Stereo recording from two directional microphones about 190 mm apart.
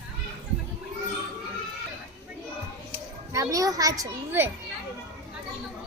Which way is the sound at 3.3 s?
20° right (ahead or behind).